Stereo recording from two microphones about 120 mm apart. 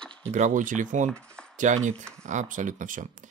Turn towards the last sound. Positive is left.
turn(degrees=-90)